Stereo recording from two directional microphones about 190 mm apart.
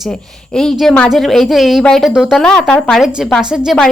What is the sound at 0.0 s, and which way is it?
Speech, 5° left (ahead or behind).